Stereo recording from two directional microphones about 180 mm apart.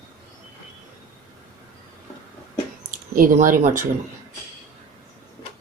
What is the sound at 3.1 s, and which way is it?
Speech, 50° right (ahead or behind).